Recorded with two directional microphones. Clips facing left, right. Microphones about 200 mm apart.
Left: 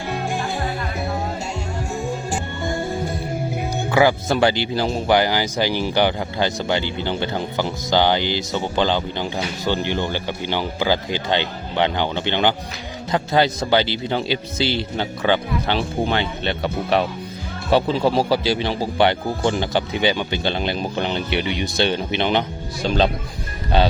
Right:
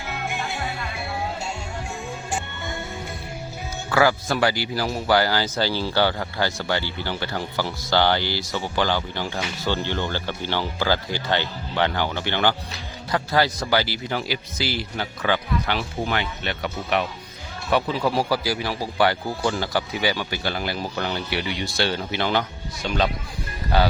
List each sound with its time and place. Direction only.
2.3 s music: 35° left (ahead or behind)
3.8 s speech: 20° left (ahead or behind)